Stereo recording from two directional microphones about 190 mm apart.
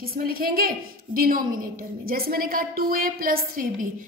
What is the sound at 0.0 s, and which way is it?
A woman's voice, 50° right (ahead or behind).